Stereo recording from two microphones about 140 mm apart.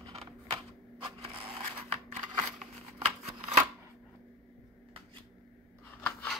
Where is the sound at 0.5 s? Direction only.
25° right (ahead or behind).